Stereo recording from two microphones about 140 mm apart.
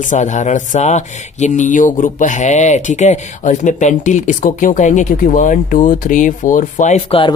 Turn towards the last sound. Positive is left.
turn(degrees=40)  # may be behind; listen again after turning